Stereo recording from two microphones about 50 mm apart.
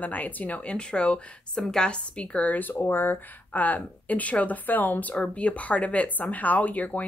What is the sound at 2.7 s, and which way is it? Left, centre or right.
Speech, left.